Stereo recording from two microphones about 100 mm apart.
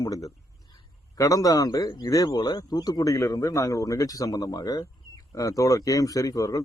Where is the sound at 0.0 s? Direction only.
35° left (ahead or behind).